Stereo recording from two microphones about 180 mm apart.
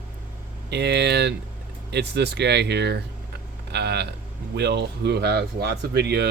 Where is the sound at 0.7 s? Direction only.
70° right (ahead or behind).